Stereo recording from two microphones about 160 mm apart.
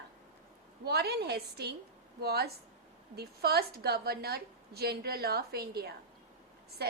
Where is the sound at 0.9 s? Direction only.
90° right.